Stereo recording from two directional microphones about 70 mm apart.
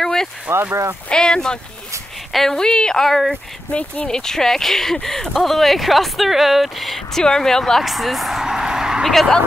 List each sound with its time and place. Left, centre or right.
0.0 s a sound: centre
0.5 s speech: right
1.0 s speech: centre
3.7 s speech: centre
9.1 s speech: centre